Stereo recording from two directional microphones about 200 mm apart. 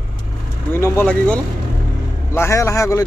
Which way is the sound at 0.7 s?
10° left (ahead or behind).